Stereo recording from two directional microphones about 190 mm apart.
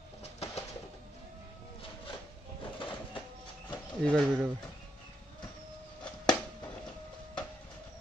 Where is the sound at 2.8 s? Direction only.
25° left (ahead or behind).